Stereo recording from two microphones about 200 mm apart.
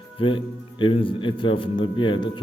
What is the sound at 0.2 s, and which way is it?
A man's voice, 25° left (ahead or behind).